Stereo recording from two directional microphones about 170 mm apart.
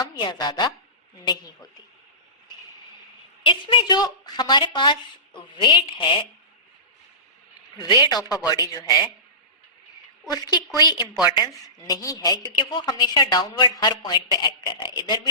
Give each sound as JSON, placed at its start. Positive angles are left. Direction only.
{"t": 0.0, "sound": "a woman's voice", "side_deg": 25}
{"t": 3.4, "sound": "a woman's voice", "side_deg": 30}
{"t": 8.0, "sound": "a woman's voice", "side_deg": 25}
{"t": 10.2, "sound": "a woman's voice", "side_deg": 20}